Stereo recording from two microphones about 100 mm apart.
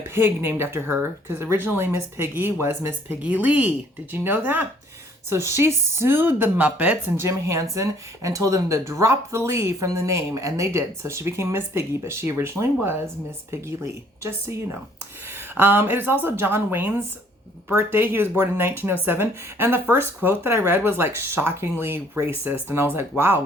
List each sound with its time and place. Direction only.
0.1 s speech: 25° right (ahead or behind)
7.2 s speech: 30° right (ahead or behind)